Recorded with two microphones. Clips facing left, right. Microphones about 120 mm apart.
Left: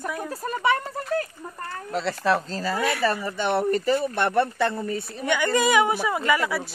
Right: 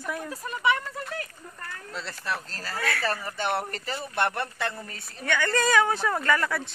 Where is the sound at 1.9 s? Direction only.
80° left.